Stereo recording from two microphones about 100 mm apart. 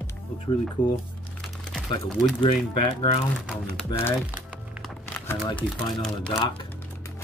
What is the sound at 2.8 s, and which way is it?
Speech, 70° left (ahead or behind).